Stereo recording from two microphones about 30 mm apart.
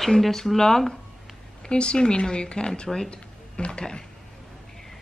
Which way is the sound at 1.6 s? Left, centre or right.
Left.